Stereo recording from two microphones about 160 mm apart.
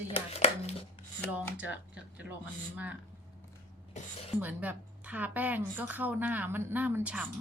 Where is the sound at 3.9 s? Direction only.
45° left (ahead or behind).